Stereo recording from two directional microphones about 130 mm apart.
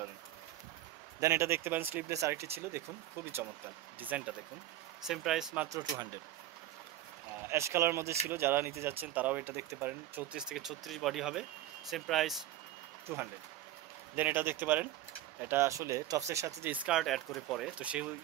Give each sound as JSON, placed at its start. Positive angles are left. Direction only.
{"t": 1.2, "sound": "speech", "side_deg": -25}
{"t": 4.0, "sound": "speech", "side_deg": -10}
{"t": 5.7, "sound": "speech", "side_deg": -30}
{"t": 7.4, "sound": "speech", "side_deg": -20}
{"t": 10.5, "sound": "speech", "side_deg": 0}
{"t": 13.1, "sound": "speech", "side_deg": -20}
{"t": 16.7, "sound": "speech", "side_deg": -10}